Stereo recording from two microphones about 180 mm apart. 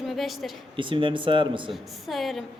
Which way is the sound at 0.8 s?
30° right (ahead or behind).